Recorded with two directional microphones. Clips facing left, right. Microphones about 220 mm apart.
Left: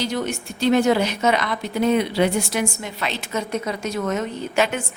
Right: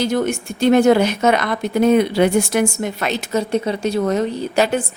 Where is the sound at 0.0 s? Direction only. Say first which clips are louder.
Right 6 dB; 50° right (ahead or behind).